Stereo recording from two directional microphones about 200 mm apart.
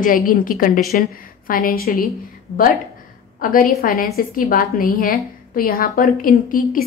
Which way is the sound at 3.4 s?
45° left (ahead or behind).